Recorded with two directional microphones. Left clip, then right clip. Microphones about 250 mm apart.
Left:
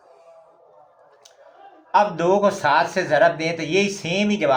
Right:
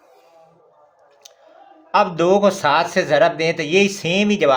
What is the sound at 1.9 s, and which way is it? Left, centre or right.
Speech, right.